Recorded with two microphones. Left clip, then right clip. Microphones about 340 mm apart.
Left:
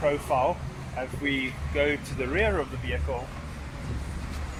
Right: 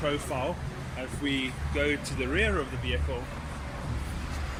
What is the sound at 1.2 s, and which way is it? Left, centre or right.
Speech, centre.